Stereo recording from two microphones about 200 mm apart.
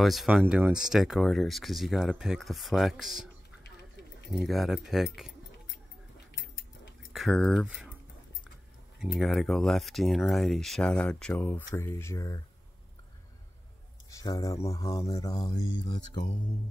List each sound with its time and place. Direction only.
0.0 s speech: centre (ahead or behind)
4.4 s speech: centre (ahead or behind)
7.1 s speech: centre (ahead or behind)
9.0 s speech: centre (ahead or behind); by 12.4 s 15° left (ahead or behind)
14.1 s speech: 15° left (ahead or behind)